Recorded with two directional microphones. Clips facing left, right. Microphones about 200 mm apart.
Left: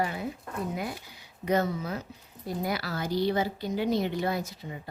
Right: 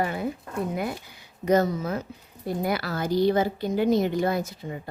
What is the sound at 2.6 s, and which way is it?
Speech, 55° right (ahead or behind).